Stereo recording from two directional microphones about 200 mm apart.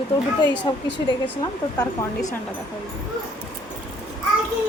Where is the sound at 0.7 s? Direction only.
25° left (ahead or behind).